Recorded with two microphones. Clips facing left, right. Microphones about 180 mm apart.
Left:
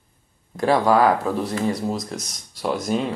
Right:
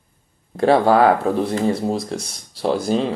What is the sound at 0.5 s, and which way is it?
Speech, 30° right (ahead or behind).